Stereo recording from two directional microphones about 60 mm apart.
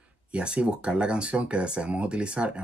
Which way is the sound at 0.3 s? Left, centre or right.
Centre.